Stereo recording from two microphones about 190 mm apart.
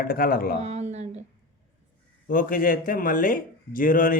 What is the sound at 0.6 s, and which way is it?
Speech, 35° right (ahead or behind).